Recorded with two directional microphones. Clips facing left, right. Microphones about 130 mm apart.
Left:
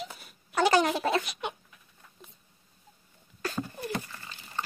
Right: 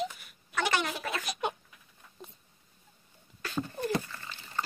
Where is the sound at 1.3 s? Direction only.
40° right (ahead or behind).